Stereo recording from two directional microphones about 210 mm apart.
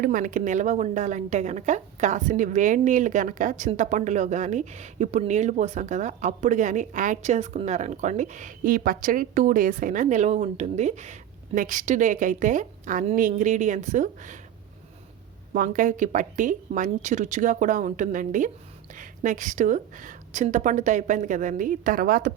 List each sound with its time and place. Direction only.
0.0 s a woman's voice: 40° right (ahead or behind)
15.5 s a woman's voice: 40° right (ahead or behind)